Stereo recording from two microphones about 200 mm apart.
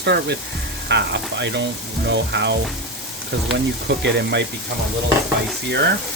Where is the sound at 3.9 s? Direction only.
60° right (ahead or behind).